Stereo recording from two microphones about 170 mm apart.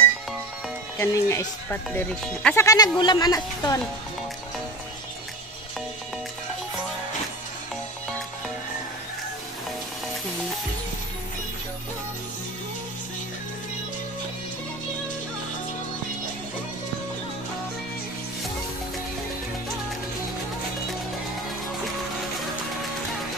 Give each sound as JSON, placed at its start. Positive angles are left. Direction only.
{"t": 0.9, "sound": "a woman's voice", "side_deg": 15}